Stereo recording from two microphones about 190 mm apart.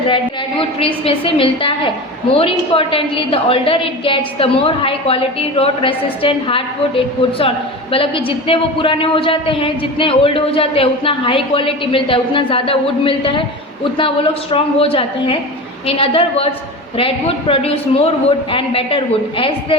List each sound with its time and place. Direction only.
0.8 s speech: 30° left (ahead or behind)
14.5 s speech: 30° left (ahead or behind)